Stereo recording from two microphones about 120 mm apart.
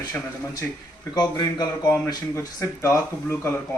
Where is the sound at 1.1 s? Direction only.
35° left (ahead or behind).